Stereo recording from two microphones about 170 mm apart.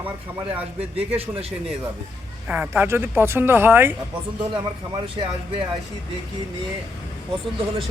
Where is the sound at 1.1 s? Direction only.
35° right (ahead or behind).